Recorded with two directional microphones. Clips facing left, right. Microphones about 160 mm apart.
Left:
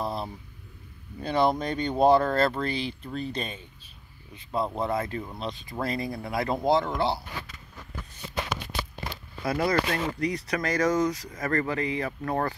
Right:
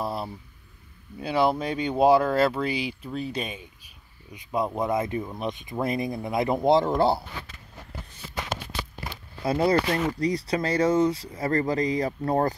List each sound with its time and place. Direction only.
0.0 s a sound: 10° right (ahead or behind)
1.2 s speech: 5° right (ahead or behind)
6.8 s speech: 40° right (ahead or behind)
9.4 s speech: 30° right (ahead or behind)